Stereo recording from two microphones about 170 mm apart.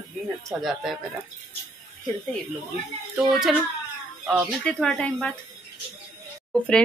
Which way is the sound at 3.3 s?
Centre (ahead or behind).